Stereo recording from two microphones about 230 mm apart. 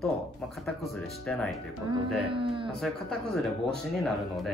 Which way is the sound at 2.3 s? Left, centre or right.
Right.